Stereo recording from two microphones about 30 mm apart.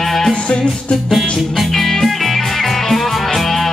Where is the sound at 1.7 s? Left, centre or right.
Centre.